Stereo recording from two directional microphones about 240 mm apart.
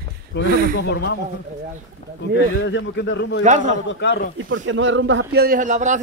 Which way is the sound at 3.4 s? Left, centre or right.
Right.